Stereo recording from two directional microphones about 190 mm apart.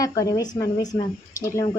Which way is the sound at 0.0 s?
15° left (ahead or behind).